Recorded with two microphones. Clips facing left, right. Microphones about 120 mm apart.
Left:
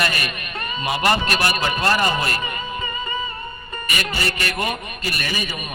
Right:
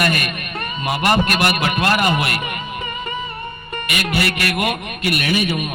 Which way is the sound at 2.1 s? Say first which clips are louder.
Right 2 dB; 70° right (ahead or behind).